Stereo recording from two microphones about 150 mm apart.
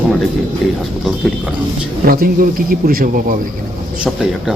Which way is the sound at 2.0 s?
75° right (ahead or behind).